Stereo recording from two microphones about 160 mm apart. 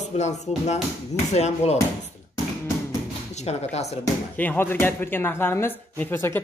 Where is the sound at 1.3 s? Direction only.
45° left (ahead or behind).